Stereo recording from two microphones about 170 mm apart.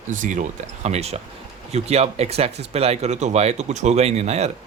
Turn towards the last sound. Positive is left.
turn(degrees=-40)  # may be behind; listen again after turning